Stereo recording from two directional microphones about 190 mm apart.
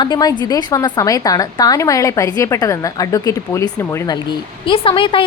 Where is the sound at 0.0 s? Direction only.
20° left (ahead or behind).